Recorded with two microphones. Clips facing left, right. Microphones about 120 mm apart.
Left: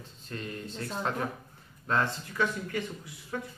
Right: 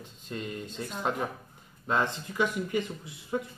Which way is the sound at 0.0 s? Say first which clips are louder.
Right 2 dB; 15° right (ahead or behind).